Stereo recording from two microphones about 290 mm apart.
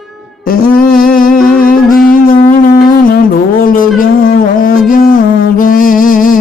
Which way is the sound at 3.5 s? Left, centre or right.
Left.